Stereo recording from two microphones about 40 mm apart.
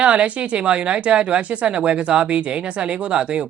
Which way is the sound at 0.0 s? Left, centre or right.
Right.